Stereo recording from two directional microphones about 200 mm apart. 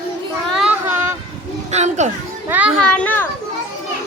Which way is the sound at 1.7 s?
35° right (ahead or behind).